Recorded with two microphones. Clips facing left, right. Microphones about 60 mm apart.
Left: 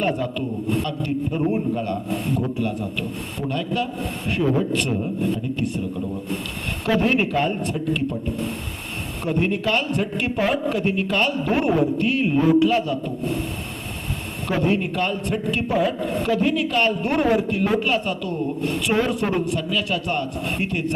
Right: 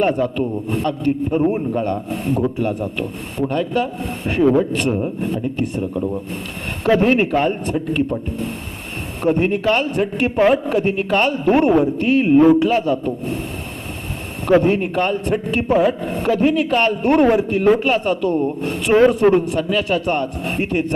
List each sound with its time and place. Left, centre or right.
0.0 s a man's voice: right
9.2 s a man's voice: right
14.4 s a man's voice: right